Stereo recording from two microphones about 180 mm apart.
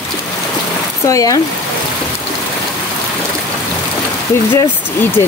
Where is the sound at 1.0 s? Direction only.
20° left (ahead or behind).